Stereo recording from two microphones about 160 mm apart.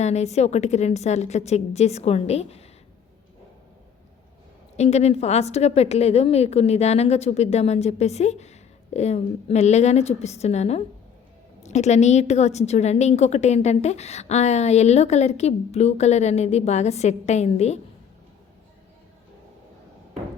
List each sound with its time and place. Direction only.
0.0 s a woman's voice: 45° left (ahead or behind)
4.8 s a woman's voice: 45° left (ahead or behind)